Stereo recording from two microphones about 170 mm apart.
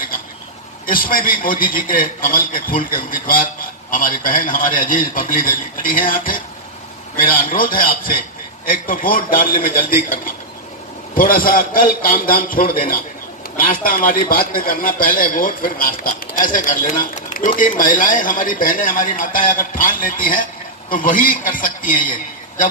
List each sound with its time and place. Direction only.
0.8 s a man's voice: 55° left (ahead or behind)